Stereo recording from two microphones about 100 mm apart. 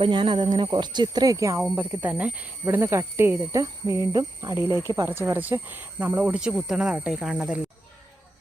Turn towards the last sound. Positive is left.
turn(degrees=-10)  # may be behind; listen again after turning